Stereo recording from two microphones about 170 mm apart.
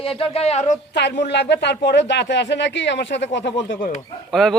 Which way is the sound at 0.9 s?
90° left.